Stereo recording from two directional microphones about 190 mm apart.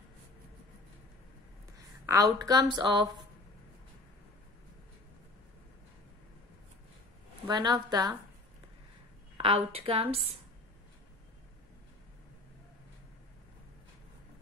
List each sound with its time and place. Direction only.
2.0 s a woman's voice: 20° right (ahead or behind)
7.4 s a woman's voice: 20° right (ahead or behind)
9.4 s a woman's voice: 30° right (ahead or behind)